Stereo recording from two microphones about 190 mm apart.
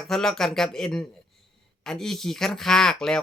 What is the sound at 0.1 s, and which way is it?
Speech, centre (ahead or behind).